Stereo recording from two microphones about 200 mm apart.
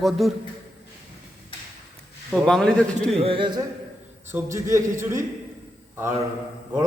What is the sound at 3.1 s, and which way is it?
Speech, 30° right (ahead or behind).